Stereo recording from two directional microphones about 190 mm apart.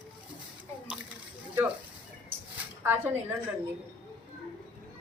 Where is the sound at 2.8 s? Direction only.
10° right (ahead or behind).